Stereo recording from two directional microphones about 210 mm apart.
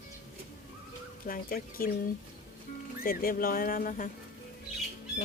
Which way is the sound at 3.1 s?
45° left (ahead or behind).